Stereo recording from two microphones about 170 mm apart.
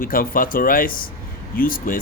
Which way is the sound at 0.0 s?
55° left (ahead or behind).